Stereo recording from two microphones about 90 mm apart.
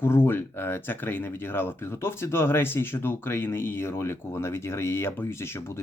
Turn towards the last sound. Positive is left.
turn(degrees=30)  # may be behind; listen again after turning